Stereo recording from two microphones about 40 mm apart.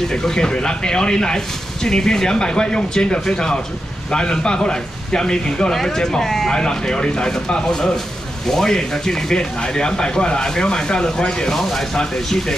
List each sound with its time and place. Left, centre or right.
0.1 s a man's voice: centre